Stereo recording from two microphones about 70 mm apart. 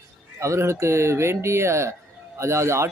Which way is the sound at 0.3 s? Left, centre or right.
Right.